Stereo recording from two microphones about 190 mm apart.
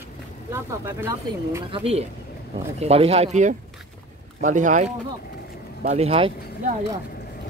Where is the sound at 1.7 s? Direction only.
30° right (ahead or behind).